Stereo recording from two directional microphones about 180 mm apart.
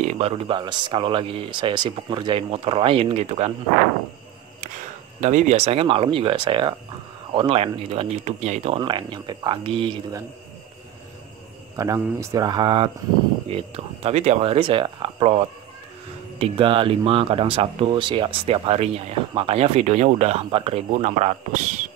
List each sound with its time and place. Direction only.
0.1 s speech: 35° right (ahead or behind)
5.2 s speech: 40° right (ahead or behind)
11.7 s speech: 20° right (ahead or behind); by 21.8 s 40° right (ahead or behind)